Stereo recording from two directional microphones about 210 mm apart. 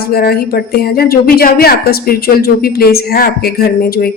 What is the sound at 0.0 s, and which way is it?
Speech, 45° left (ahead or behind).